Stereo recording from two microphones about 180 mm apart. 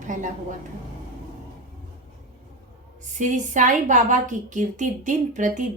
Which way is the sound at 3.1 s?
45° right (ahead or behind).